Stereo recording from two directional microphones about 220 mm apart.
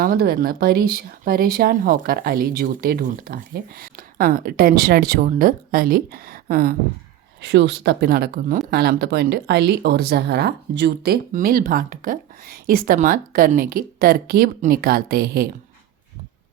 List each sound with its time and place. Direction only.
0.0 s speech: 45° right (ahead or behind)
7.4 s speech: 50° right (ahead or behind)